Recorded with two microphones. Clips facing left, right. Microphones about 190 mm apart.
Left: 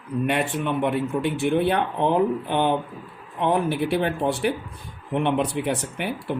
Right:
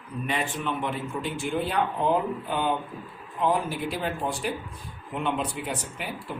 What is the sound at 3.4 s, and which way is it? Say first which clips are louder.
Speech: left 4 dB; 65° left (ahead or behind).